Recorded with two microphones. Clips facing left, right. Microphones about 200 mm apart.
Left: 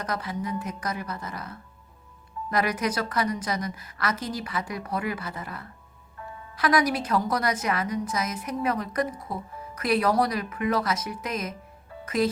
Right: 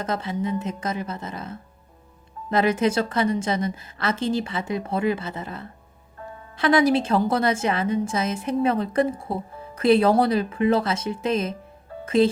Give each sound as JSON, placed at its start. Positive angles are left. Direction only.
{"t": 0.0, "sound": "a woman's voice", "side_deg": -25}